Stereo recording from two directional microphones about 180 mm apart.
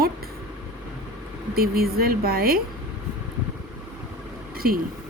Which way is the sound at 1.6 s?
55° right (ahead or behind).